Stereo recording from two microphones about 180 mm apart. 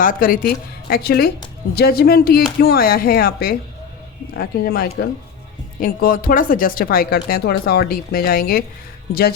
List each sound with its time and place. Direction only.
0.0 s speech: 50° left (ahead or behind)